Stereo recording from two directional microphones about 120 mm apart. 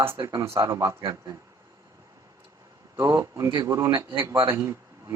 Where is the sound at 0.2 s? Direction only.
35° right (ahead or behind).